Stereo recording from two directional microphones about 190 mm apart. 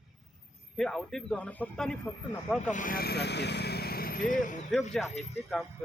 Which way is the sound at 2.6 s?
45° left (ahead or behind).